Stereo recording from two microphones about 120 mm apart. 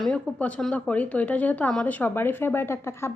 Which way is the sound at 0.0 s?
10° left (ahead or behind).